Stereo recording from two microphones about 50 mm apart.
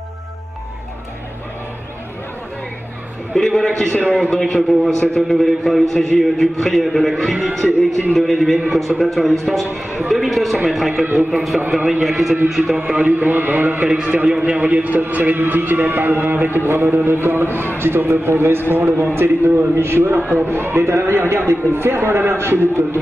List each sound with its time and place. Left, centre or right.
3.3 s a man's voice: centre
9.9 s a man's voice: centre
12.7 s a man's voice: right
13.8 s a man's voice: right